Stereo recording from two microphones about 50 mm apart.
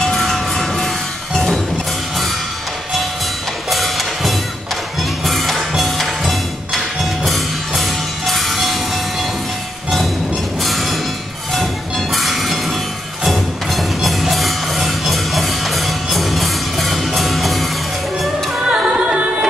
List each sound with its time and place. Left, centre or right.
0.0 s music: centre
3.7 s music: centre
10.6 s music: centre
11.5 s train: centre
13.2 s music: centre
18.7 s music: centre